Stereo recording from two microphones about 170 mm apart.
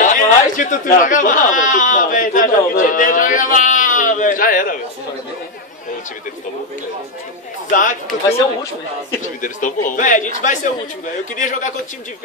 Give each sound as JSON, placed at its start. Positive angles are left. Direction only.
{"t": 0.0, "sound": "a sound", "side_deg": 50}
{"t": 7.7, "sound": "a man's voice", "side_deg": 50}
{"t": 9.4, "sound": "a man's voice", "side_deg": 50}